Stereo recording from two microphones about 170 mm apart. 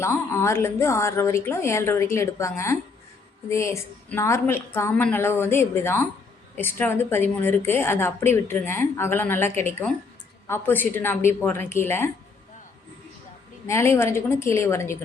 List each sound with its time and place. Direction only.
0.0 s a woman's voice: 15° left (ahead or behind)
13.7 s a woman's voice: 15° left (ahead or behind)